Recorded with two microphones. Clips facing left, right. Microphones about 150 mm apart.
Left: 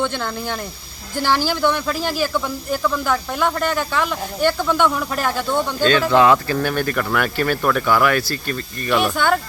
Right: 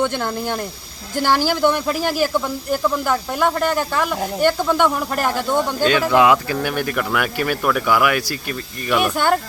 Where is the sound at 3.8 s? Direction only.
10° right (ahead or behind).